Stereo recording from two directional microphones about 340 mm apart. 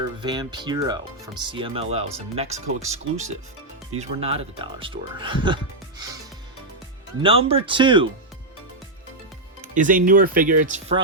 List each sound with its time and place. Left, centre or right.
0.2 s speech: centre
7.2 s speech: centre
9.6 s music: right
10.1 s speech: right